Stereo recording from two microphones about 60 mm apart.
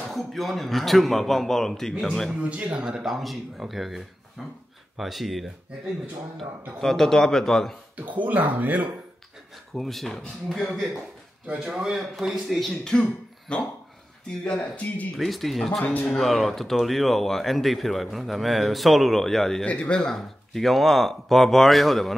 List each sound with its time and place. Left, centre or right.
0.1 s speech: centre
2.5 s a man's voice: centre
7.9 s speech: right
9.8 s speech: centre
11.6 s a man's voice: centre
11.9 s speech: centre
15.1 s speech: centre
15.8 s speech: left
16.2 s speech: centre
19.6 s a man's voice: left
20.2 s speech: centre